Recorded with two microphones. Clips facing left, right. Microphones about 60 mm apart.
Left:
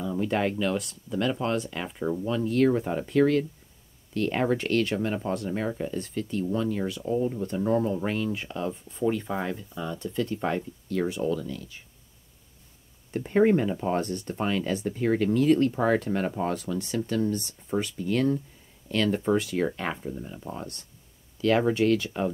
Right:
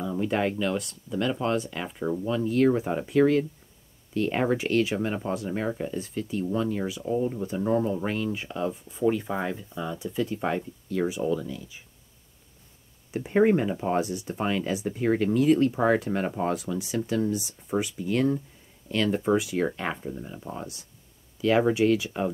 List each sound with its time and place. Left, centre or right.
0.0 s speech: centre
13.1 s speech: centre